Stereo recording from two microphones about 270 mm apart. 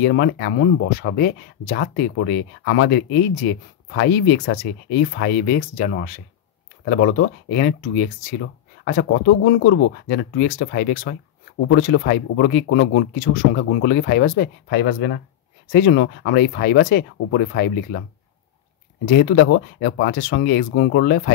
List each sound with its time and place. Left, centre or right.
0.0 s speech: left
19.0 s speech: left